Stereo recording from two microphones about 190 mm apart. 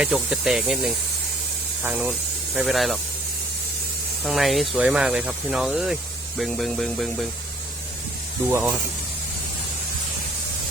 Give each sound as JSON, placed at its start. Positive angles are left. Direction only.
{"t": 0.0, "sound": "speech", "side_deg": -5}
{"t": 4.2, "sound": "speech", "side_deg": 0}
{"t": 8.4, "sound": "speech", "side_deg": -15}